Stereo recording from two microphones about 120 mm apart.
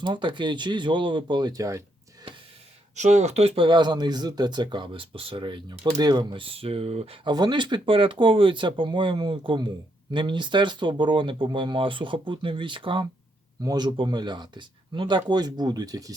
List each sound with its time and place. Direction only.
0.0 s speech: 40° right (ahead or behind)
2.9 s speech: 75° right (ahead or behind); by 6.4 s 35° right (ahead or behind)
6.4 s speech: 50° right (ahead or behind)
7.3 s speech: 35° right (ahead or behind)